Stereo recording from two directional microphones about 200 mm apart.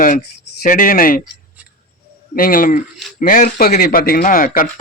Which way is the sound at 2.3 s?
45° left (ahead or behind).